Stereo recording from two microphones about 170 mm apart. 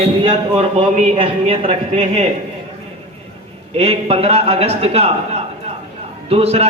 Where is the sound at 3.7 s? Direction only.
35° right (ahead or behind).